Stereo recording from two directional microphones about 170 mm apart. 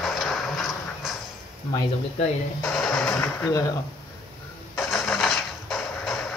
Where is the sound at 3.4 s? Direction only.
20° left (ahead or behind).